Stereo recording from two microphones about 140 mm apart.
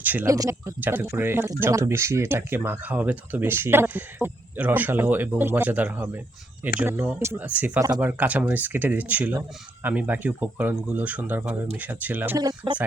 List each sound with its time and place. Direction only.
0.0 s speech: 10° right (ahead or behind)
0.3 s speech: 25° right (ahead or behind)
12.4 s speech: 25° right (ahead or behind)